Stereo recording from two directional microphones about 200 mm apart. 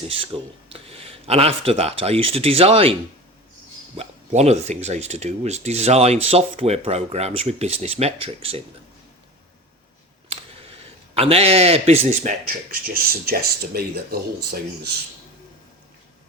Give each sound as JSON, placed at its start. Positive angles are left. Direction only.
{"t": 0.3, "sound": "speech", "side_deg": -30}
{"t": 3.9, "sound": "speech", "side_deg": -35}
{"t": 10.2, "sound": "a sound", "side_deg": -30}
{"t": 12.7, "sound": "speech", "side_deg": -50}